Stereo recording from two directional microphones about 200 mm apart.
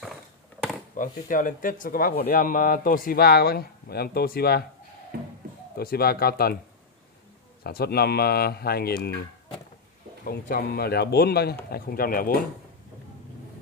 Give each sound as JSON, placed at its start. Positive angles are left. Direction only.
{"t": 0.9, "sound": "speech", "side_deg": 40}
{"t": 5.1, "sound": "speech", "side_deg": -50}
{"t": 5.8, "sound": "speech", "side_deg": 50}
{"t": 7.6, "sound": "speech", "side_deg": 50}
{"t": 10.2, "sound": "speech", "side_deg": 45}